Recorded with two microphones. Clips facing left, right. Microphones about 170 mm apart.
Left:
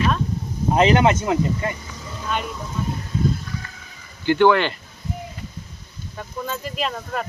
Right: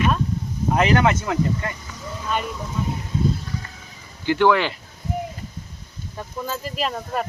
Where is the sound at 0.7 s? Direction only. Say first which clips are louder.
Left 2 dB; 20° left (ahead or behind).